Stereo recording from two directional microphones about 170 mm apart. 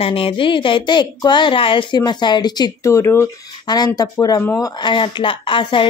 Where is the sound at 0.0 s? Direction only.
30° left (ahead or behind).